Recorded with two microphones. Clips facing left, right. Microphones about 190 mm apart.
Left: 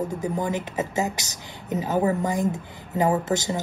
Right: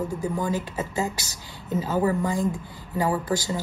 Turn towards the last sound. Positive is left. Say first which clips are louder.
# left 2 dB
turn(degrees=20)  # may be behind; listen again after turning